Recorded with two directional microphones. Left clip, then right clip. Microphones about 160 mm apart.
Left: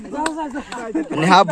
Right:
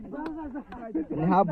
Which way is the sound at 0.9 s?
5° left (ahead or behind).